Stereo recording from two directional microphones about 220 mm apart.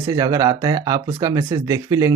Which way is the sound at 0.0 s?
15° right (ahead or behind).